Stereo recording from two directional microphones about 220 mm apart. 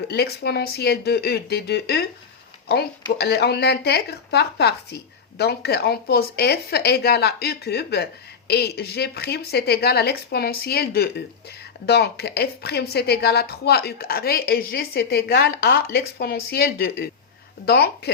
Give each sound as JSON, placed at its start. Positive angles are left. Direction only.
{"t": 0.1, "sound": "a woman's voice", "side_deg": 45}